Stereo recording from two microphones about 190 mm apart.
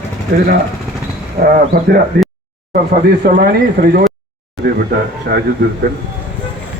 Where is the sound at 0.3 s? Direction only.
60° right (ahead or behind).